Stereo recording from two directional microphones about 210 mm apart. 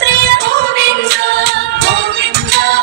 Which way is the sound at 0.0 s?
55° right (ahead or behind).